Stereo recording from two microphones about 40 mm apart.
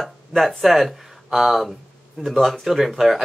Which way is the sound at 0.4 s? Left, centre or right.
Centre.